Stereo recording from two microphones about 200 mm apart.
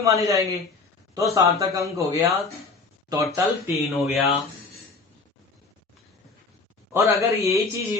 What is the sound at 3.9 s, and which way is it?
Speech, centre (ahead or behind).